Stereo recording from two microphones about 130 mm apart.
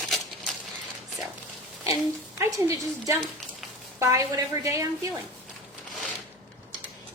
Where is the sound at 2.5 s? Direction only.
25° right (ahead or behind).